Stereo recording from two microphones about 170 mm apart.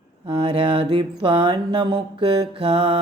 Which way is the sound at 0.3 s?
30° right (ahead or behind).